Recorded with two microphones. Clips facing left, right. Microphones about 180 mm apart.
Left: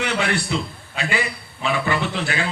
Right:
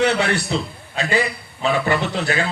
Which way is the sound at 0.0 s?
40° right (ahead or behind).